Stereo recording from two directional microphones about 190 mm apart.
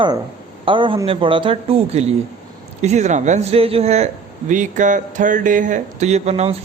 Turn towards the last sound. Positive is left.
turn(degrees=-35)  # may be behind; listen again after turning